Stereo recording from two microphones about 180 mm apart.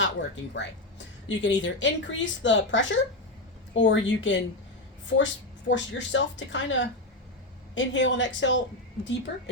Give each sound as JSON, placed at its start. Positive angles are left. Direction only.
{"t": 0.0, "sound": "speech", "side_deg": 80}
{"t": 9.3, "sound": "speech", "side_deg": 70}